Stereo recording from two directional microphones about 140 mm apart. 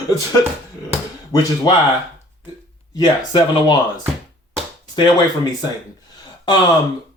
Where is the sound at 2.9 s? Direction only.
30° left (ahead or behind).